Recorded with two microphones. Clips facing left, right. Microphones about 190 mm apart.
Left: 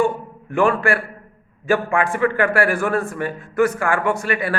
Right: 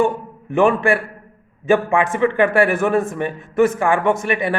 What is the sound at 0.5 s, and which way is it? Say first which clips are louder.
A man's voice: right 3 dB; 20° right (ahead or behind).